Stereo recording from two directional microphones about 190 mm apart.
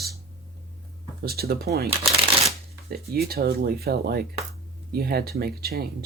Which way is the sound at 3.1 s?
55° right (ahead or behind).